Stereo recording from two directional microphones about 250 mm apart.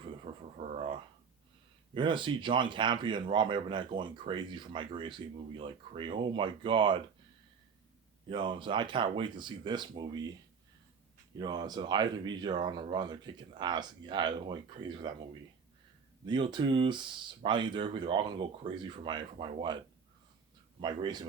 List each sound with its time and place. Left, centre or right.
0.5 s a sound: right
2.0 s speech: centre
8.3 s speech: centre
11.3 s speech: centre
16.2 s speech: centre
20.8 s speech: centre